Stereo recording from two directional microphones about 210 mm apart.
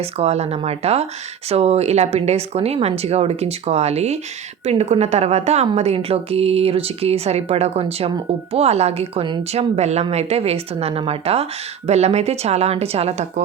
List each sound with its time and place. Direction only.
0.0 s a woman's voice: 30° right (ahead or behind)